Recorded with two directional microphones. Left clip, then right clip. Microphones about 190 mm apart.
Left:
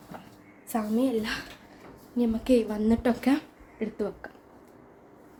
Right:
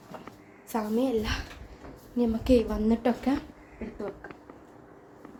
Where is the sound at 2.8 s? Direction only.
15° left (ahead or behind).